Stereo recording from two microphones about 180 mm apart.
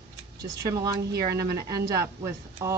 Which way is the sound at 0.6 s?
20° right (ahead or behind).